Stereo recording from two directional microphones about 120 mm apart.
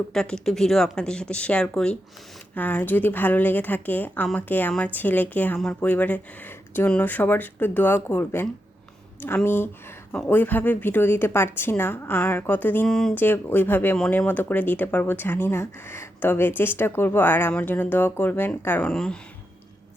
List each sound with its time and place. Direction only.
0.1 s speech: 5° left (ahead or behind)
13.1 s speech: 15° left (ahead or behind)
18.9 s speech: 5° left (ahead or behind)